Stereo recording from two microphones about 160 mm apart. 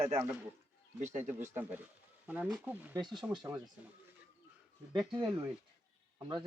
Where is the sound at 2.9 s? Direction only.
25° right (ahead or behind).